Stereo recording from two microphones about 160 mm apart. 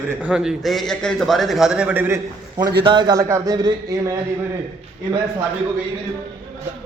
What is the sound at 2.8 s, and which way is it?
Speech, 30° right (ahead or behind).